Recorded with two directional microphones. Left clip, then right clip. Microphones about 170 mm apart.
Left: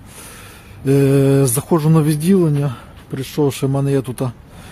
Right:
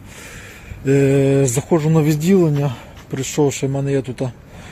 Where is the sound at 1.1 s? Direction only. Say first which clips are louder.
Left 1 dB; 45° left (ahead or behind).